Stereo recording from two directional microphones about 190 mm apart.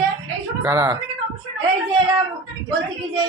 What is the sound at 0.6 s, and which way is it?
Speech, 20° right (ahead or behind).